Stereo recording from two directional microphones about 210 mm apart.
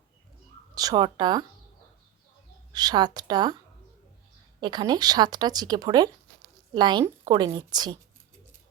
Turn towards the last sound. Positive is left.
turn(degrees=-20)  # may be behind; listen again after turning